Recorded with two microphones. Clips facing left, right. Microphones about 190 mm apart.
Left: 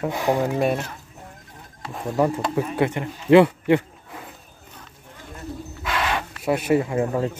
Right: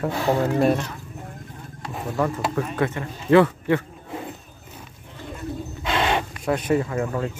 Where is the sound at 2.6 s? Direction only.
15° left (ahead or behind).